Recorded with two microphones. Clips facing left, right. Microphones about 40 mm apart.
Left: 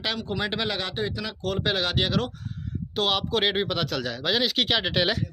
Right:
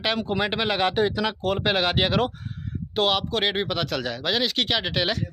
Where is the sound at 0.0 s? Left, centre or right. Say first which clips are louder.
Right 4 dB; centre.